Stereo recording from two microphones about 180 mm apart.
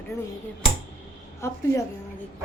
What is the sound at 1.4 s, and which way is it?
Speech, 15° left (ahead or behind).